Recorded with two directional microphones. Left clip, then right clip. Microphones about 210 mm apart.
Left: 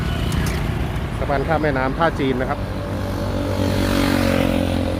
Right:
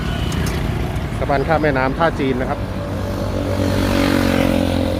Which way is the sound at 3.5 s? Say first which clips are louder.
Right 2 dB; 40° left (ahead or behind).